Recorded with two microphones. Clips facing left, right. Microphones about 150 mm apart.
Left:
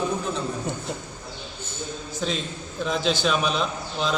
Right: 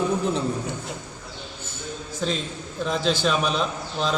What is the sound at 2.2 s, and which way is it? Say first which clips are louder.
A man's voice: right 1 dB; centre (ahead or behind).